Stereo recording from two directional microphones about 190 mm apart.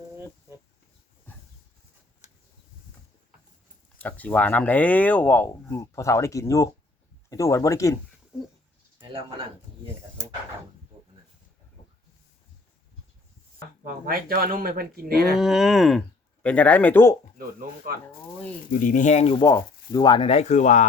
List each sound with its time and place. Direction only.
1.3 s a sound: 10° left (ahead or behind)
3.9 s speech: 10° left (ahead or behind)
9.0 s speech: 25° right (ahead or behind)
13.8 s speech: 50° right (ahead or behind)
15.4 s speech: centre (ahead or behind)
18.7 s speech: 45° left (ahead or behind)
19.5 s speech: 20° left (ahead or behind); by 20.8 s 40° left (ahead or behind)